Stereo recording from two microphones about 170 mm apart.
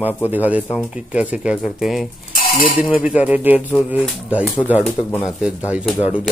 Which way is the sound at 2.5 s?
55° left (ahead or behind).